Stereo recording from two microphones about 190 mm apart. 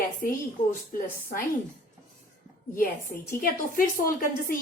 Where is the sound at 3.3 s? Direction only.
50° left (ahead or behind).